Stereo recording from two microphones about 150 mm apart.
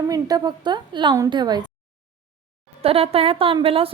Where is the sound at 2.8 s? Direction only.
40° right (ahead or behind).